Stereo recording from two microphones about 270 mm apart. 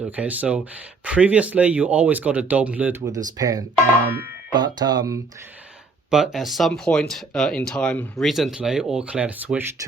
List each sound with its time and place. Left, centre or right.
0.2 s speech: centre
6.1 s speech: centre